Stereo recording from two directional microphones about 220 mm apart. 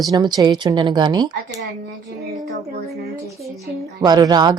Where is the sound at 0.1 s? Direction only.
20° right (ahead or behind).